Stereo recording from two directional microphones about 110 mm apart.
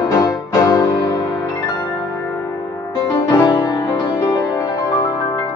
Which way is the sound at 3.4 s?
30° left (ahead or behind).